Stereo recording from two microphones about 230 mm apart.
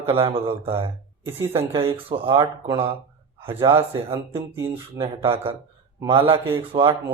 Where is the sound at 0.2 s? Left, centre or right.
Right.